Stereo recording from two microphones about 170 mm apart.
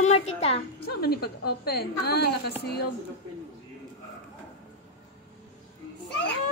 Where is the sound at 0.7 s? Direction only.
70° left (ahead or behind).